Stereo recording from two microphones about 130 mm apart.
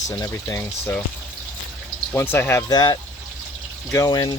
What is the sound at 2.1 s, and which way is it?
Speech, 15° left (ahead or behind).